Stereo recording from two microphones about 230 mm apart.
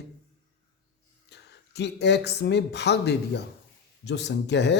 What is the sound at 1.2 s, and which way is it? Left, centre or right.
Speech, left.